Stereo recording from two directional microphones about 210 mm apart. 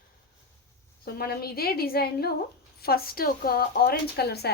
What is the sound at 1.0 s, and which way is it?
A woman's voice, 45° left (ahead or behind).